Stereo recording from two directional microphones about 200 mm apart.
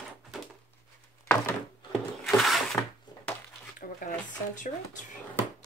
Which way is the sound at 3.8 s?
40° left (ahead or behind).